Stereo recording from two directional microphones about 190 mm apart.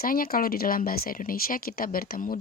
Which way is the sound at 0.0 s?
50° left (ahead or behind).